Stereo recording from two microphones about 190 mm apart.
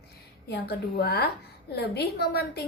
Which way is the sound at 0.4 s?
55° left (ahead or behind).